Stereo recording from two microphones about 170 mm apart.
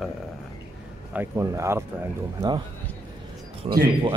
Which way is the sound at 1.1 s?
15° right (ahead or behind).